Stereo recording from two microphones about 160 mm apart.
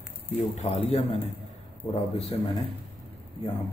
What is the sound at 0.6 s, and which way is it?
A man's voice, 40° left (ahead or behind).